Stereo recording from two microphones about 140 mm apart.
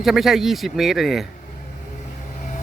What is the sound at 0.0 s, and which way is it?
Speech, centre (ahead or behind).